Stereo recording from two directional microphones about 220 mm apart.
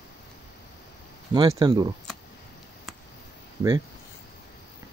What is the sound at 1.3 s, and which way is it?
Speech, 20° right (ahead or behind).